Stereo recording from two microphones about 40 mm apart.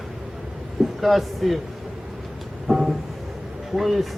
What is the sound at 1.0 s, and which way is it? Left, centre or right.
Speech, centre.